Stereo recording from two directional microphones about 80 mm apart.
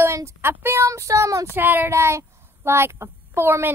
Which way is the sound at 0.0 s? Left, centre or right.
Right.